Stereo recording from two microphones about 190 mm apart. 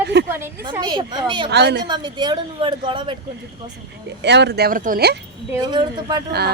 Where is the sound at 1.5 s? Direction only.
60° right (ahead or behind).